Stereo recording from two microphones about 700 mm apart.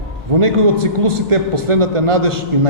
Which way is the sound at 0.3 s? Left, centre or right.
Right.